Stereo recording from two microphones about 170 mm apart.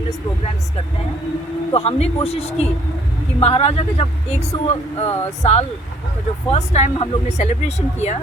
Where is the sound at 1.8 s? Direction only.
35° left (ahead or behind).